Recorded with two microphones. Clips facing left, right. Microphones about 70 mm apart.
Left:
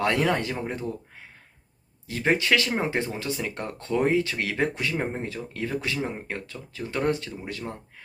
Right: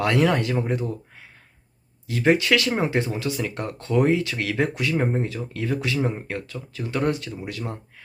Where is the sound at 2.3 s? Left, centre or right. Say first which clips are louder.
Right 3 dB; left.